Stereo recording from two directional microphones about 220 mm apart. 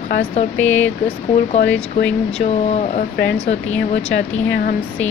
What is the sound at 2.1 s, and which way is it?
Speech, 5° left (ahead or behind).